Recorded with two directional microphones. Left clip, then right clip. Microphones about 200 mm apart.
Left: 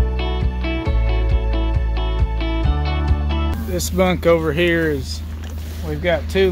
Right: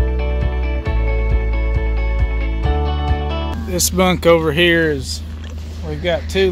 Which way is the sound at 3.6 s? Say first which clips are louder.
Right 3 dB; 55° right (ahead or behind).